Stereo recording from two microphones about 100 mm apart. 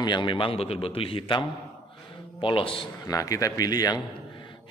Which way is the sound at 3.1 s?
35° left (ahead or behind).